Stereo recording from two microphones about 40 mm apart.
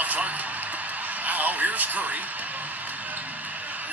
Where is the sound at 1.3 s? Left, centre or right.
Right.